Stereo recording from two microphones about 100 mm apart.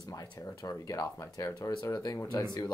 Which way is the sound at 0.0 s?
35° left (ahead or behind).